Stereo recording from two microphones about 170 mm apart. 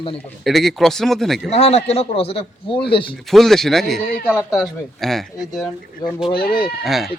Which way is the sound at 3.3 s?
Centre (ahead or behind).